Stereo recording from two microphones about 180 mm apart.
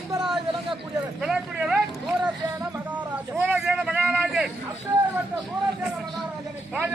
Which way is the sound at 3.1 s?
10° right (ahead or behind).